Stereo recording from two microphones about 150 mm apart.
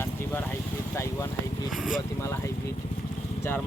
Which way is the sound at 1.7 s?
5° right (ahead or behind).